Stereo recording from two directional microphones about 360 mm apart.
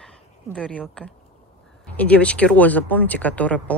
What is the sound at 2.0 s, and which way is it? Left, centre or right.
Speech, centre.